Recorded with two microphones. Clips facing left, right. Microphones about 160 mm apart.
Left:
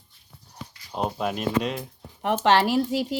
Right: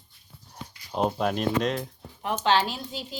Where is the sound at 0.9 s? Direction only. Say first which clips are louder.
Right 2 dB; 5° left (ahead or behind).